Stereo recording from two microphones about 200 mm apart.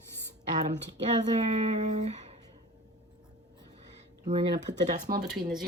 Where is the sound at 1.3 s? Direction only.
35° right (ahead or behind).